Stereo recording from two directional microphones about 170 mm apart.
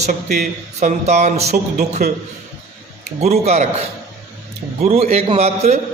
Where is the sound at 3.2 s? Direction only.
40° right (ahead or behind).